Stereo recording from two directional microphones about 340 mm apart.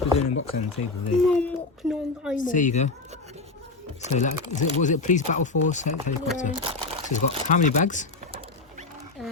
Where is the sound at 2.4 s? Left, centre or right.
Left.